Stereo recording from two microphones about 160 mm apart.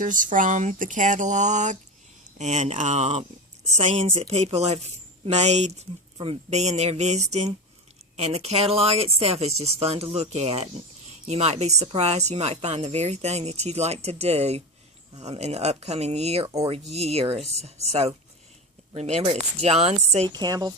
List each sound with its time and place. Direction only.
0.0 s speech: 55° right (ahead or behind)
20.3 s a woman's voice: 25° right (ahead or behind)